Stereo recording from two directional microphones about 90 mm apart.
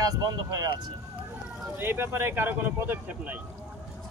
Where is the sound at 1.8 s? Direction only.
25° right (ahead or behind).